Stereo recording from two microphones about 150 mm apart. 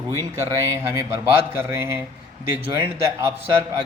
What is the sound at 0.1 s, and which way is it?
Speech, 20° right (ahead or behind).